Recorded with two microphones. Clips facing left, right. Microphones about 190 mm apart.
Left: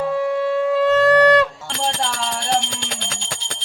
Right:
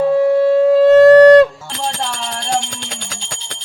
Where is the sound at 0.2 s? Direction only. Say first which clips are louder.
Right 8 dB; 35° right (ahead or behind).